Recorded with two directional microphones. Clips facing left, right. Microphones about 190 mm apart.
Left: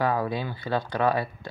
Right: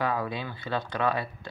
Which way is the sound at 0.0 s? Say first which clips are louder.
Left 4 dB; 35° left (ahead or behind).